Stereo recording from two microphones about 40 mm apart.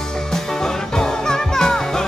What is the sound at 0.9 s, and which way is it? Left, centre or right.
Music, centre.